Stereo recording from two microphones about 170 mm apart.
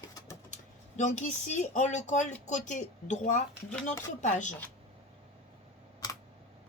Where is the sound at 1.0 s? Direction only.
45° left (ahead or behind).